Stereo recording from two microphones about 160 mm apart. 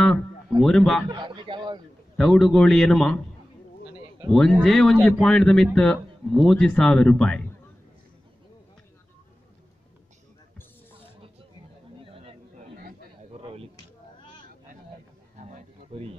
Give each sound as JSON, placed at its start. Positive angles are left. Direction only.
{"t": 0.6, "sound": "speech", "side_deg": 5}
{"t": 1.1, "sound": "speech", "side_deg": -30}
{"t": 2.1, "sound": "speech", "side_deg": 0}
{"t": 4.3, "sound": "speech", "side_deg": 0}
{"t": 12.0, "sound": "a sound", "side_deg": -35}
{"t": 15.4, "sound": "a sound", "side_deg": -45}